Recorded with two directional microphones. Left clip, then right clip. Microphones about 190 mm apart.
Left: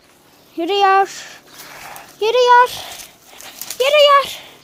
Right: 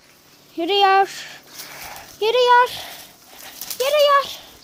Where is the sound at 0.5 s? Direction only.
Centre (ahead or behind).